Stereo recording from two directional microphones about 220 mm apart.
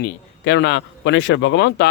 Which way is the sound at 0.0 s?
50° left (ahead or behind).